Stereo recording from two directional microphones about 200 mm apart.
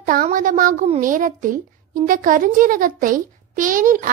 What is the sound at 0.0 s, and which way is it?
A child's voice, 40° right (ahead or behind).